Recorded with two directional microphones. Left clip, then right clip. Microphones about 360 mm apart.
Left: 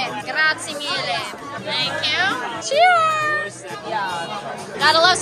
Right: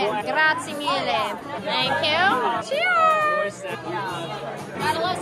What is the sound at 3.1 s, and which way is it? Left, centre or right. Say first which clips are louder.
Speech: even; centre.